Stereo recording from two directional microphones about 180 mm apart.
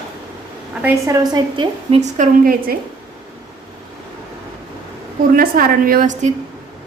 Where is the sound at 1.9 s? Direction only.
40° right (ahead or behind).